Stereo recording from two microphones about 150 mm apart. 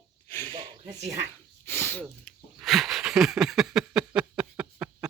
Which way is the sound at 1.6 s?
15° left (ahead or behind).